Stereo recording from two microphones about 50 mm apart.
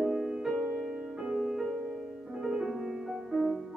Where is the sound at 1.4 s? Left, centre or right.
Centre.